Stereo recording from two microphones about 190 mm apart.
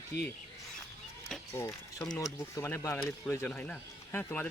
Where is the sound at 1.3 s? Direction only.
Centre (ahead or behind).